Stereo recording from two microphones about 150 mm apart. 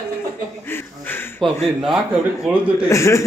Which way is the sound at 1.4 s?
Centre (ahead or behind).